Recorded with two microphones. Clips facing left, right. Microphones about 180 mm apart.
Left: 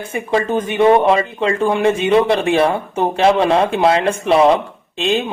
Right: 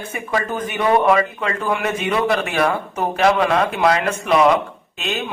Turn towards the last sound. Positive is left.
turn(degrees=25)  # may be behind; listen again after turning